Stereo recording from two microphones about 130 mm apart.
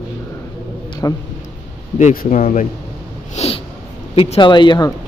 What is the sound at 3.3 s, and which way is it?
Snort, 50° left (ahead or behind).